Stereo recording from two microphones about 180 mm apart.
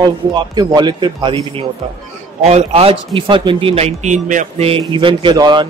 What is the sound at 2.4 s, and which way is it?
A man's voice, 35° right (ahead or behind).